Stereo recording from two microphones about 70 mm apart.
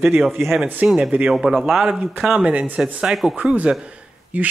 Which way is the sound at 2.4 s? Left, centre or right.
Centre.